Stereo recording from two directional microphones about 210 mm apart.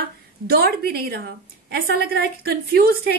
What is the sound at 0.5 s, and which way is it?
A woman's voice, 45° right (ahead or behind).